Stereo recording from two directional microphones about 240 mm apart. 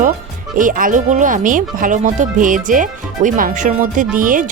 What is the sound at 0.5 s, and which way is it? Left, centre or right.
Speech, right.